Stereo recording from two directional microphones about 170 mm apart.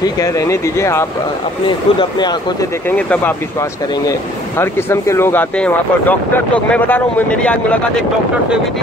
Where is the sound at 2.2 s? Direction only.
25° left (ahead or behind).